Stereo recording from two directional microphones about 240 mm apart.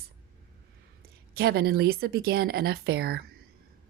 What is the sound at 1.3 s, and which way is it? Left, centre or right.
Speech, right.